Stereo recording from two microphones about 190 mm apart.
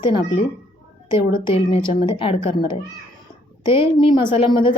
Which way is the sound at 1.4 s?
25° left (ahead or behind).